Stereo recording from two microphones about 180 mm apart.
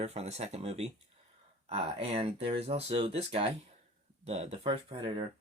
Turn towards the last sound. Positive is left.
turn(degrees=-30)  # may be behind; listen again after turning